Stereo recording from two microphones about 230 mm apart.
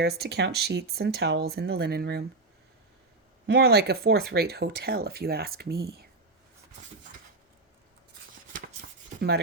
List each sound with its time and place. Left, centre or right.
0.0 s speech: right
3.4 s speech: right